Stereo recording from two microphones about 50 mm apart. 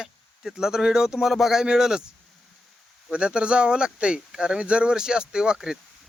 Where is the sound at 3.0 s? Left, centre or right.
Centre.